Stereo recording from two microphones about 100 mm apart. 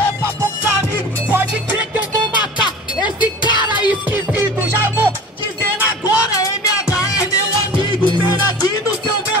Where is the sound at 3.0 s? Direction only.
50° left (ahead or behind).